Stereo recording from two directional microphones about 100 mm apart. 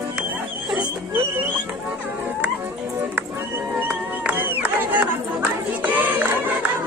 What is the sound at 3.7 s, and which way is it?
Music, 15° right (ahead or behind).